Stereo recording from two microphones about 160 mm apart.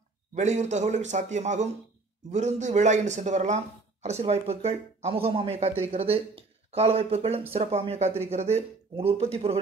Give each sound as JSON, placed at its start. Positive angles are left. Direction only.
{"t": 0.3, "sound": "speech", "side_deg": -45}